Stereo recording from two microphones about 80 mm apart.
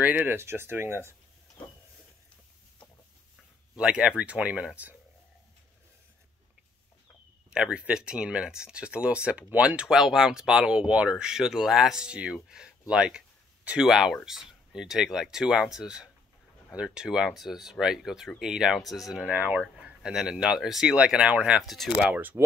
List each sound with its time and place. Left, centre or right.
0.0 s speech: right
3.7 s speech: centre
7.5 s speech: centre
19.2 s speech: centre
19.8 s speech: centre
21.6 s speech: centre
22.0 s speech: centre